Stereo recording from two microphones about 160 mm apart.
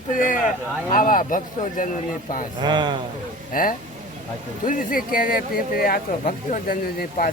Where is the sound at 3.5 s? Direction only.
60° left (ahead or behind).